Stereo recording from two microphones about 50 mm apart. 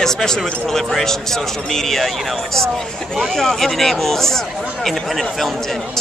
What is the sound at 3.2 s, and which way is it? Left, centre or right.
Speech, centre.